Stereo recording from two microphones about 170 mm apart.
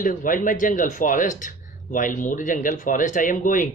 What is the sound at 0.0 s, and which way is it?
Speech, 50° left (ahead or behind).